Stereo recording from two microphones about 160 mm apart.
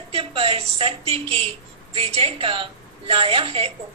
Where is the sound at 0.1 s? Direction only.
40° right (ahead or behind).